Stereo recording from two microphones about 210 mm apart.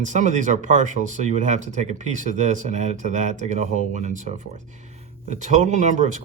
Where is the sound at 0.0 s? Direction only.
35° right (ahead or behind).